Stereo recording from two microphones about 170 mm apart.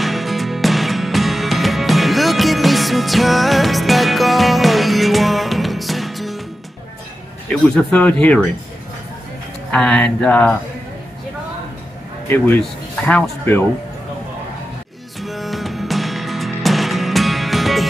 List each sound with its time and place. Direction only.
0.0 s music: centre (ahead or behind)
7.4 s speech: 5° left (ahead or behind)
9.7 s speech: 5° left (ahead or behind)
13.0 s speech: 10° left (ahead or behind)
15.2 s music: centre (ahead or behind)